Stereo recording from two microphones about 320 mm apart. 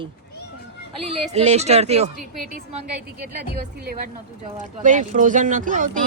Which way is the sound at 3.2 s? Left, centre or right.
Right.